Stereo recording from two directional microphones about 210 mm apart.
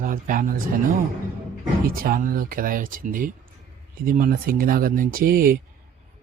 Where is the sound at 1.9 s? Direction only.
45° right (ahead or behind).